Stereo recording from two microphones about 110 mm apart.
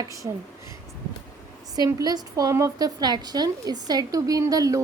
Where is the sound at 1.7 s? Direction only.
35° right (ahead or behind).